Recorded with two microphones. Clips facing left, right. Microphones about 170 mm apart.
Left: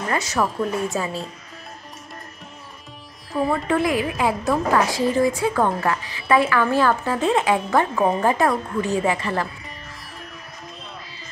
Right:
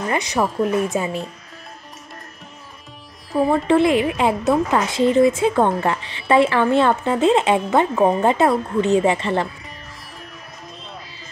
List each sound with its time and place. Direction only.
0.1 s speech: 20° right (ahead or behind)
3.3 s speech: 30° right (ahead or behind)